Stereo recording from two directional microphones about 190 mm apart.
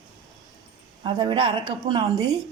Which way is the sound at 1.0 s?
25° right (ahead or behind).